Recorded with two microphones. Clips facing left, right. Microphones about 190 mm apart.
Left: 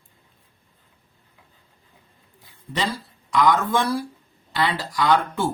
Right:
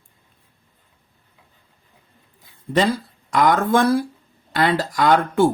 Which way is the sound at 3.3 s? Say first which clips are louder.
Right 3 dB; 50° right (ahead or behind).